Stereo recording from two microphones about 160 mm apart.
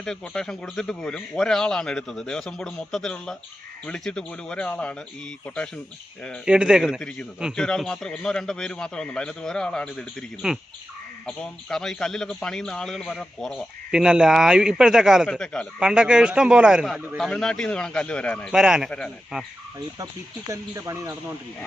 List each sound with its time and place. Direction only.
0.0 s a man's voice: 5° left (ahead or behind)
6.4 s a man's voice: 5° right (ahead or behind)
18.5 s a man's voice: 5° right (ahead or behind)
20.5 s speech: 20° right (ahead or behind)